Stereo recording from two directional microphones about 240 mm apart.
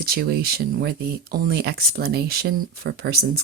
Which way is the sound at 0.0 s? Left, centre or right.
Right.